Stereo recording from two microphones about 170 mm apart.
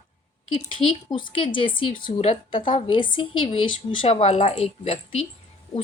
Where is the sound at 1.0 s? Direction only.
30° left (ahead or behind).